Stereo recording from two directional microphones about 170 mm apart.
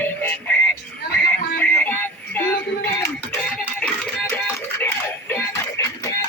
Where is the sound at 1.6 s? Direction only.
10° left (ahead or behind).